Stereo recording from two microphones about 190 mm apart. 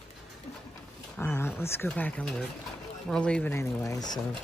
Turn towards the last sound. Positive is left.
turn(degrees=20)  # may be behind; listen again after turning